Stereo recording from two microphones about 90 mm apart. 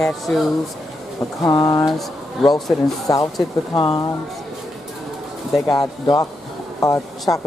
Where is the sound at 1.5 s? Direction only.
45° left (ahead or behind).